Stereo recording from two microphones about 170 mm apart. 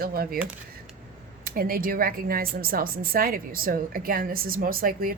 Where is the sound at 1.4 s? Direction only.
55° right (ahead or behind).